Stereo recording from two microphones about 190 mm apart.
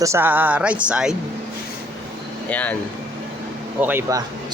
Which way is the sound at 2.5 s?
10° left (ahead or behind).